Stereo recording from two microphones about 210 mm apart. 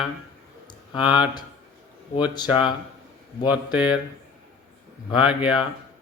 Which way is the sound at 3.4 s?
5° right (ahead or behind).